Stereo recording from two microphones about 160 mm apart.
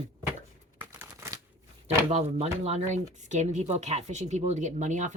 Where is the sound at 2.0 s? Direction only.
40° right (ahead or behind).